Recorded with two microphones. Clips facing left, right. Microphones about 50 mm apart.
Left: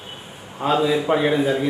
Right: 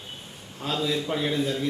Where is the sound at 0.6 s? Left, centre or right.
Left.